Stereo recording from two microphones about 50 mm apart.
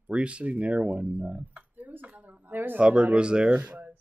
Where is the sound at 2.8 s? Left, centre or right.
Right.